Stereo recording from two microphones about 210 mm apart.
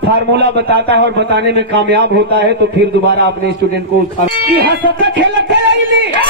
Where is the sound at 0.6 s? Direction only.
50° right (ahead or behind).